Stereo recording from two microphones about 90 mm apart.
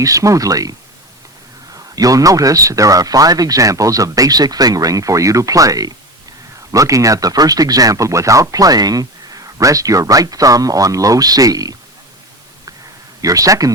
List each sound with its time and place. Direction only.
0.0 s speech: 35° right (ahead or behind)
13.2 s speech: 40° right (ahead or behind)